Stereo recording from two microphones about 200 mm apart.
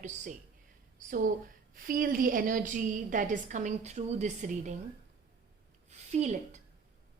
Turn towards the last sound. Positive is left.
turn(degrees=-35)  # may be behind; listen again after turning